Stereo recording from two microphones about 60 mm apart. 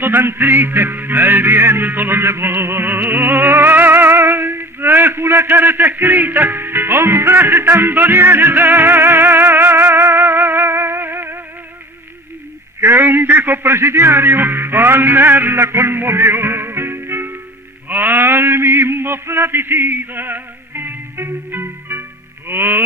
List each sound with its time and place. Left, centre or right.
0.0 s music: right
12.8 s a man's voice: right
17.8 s a sound: right
22.4 s music: right